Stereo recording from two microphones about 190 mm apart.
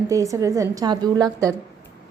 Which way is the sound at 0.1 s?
15° right (ahead or behind).